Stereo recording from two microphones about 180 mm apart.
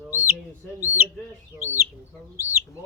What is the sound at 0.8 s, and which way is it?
Bird, 10° right (ahead or behind).